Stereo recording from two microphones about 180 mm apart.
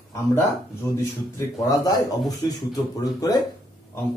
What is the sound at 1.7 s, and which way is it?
Speech, 20° left (ahead or behind).